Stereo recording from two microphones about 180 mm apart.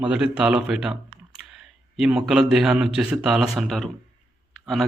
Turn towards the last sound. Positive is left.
turn(degrees=0)  # may be behind; listen again after turning